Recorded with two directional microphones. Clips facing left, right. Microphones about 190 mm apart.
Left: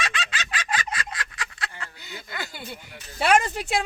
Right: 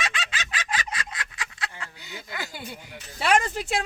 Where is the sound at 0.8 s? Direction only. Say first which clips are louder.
Left 2 dB; 20° right (ahead or behind).